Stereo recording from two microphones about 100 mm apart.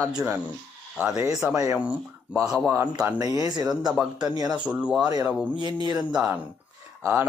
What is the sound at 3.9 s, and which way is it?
Speech, 5° right (ahead or behind).